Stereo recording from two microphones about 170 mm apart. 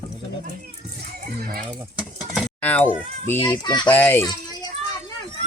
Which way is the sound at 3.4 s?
25° left (ahead or behind).